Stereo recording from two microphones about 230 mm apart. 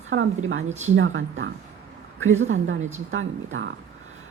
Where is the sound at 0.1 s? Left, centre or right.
Right.